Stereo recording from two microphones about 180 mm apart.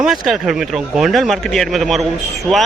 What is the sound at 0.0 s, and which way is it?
A man's voice, centre (ahead or behind).